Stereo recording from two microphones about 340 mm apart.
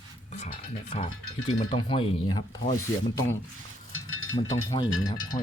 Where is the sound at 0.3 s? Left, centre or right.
Centre.